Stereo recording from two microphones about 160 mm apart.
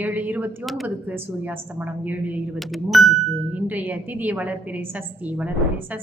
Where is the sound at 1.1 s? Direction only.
10° right (ahead or behind).